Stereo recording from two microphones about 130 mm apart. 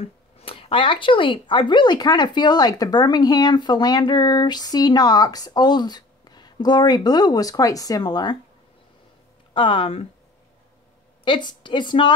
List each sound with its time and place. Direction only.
0.0 s speech: 50° left (ahead or behind); by 8.4 s 35° left (ahead or behind)
9.5 s speech: 40° left (ahead or behind)
11.2 s speech: 35° left (ahead or behind)